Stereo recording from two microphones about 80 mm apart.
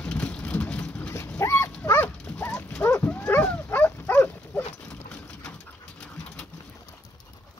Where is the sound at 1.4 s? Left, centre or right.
Left.